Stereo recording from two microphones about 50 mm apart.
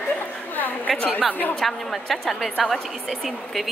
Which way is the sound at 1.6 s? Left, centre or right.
Centre.